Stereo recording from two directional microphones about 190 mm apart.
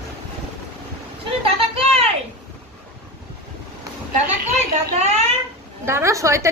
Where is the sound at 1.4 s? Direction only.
30° right (ahead or behind).